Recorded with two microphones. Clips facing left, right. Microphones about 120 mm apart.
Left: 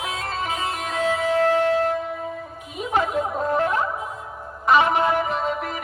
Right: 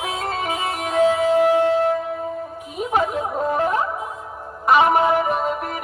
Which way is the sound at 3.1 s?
Centre (ahead or behind).